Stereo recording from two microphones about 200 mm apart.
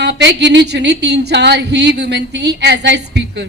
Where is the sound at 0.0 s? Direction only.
60° right (ahead or behind).